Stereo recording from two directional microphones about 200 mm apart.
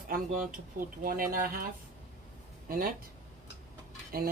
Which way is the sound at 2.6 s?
45° right (ahead or behind).